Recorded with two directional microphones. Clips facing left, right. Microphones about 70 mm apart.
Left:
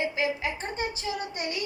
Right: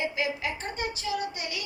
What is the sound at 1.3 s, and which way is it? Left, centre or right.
Child singing, left.